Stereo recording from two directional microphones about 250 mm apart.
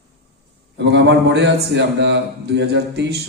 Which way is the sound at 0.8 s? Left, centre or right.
Right.